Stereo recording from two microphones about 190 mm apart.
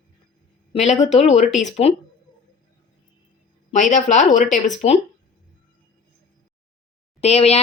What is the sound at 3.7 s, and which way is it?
Speech, 40° left (ahead or behind).